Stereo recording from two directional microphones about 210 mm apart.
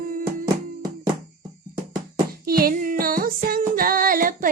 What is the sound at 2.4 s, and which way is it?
Music, 45° right (ahead or behind).